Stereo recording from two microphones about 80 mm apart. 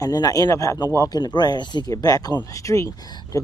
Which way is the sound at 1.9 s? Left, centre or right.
Left.